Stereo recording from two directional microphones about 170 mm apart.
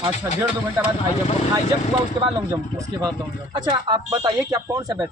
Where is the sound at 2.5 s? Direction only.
20° right (ahead or behind).